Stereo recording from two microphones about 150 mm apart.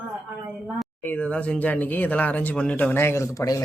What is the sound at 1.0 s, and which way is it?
Speech, 10° left (ahead or behind).